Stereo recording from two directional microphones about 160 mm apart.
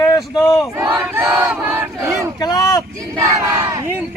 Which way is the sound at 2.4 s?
25° left (ahead or behind).